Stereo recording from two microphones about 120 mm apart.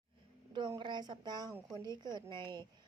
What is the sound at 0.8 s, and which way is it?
Speech, 40° right (ahead or behind).